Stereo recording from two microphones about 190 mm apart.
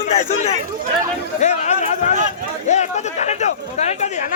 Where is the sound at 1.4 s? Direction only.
35° left (ahead or behind).